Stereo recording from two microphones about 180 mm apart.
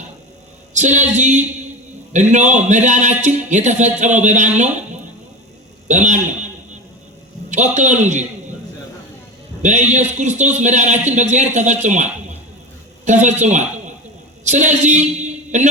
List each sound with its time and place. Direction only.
0.7 s a man's voice: 40° right (ahead or behind)
7.5 s a man's voice: 40° right (ahead or behind)
9.9 s a man's voice: 40° right (ahead or behind)